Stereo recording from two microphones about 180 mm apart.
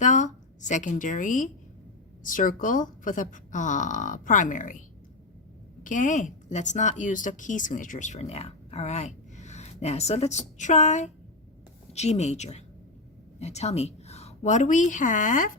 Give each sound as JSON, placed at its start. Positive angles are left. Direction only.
{"t": 0.0, "sound": "speech", "side_deg": 45}
{"t": 5.8, "sound": "a woman's voice", "side_deg": 45}